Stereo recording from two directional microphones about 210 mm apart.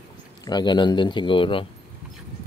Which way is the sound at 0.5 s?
20° left (ahead or behind).